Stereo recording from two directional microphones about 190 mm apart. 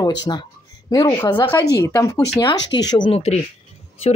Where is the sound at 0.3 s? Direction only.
20° left (ahead or behind).